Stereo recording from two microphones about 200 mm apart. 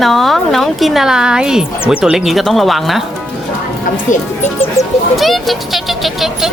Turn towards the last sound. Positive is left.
turn(degrees=0)  # may be behind; listen again after turning